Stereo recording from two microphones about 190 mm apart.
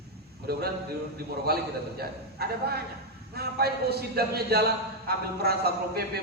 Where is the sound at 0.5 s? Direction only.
55° right (ahead or behind).